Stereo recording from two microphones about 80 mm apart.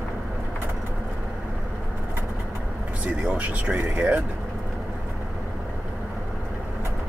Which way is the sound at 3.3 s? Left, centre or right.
Centre.